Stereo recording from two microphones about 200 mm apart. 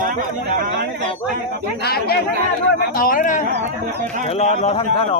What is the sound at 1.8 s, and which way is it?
A man's voice, 50° left (ahead or behind).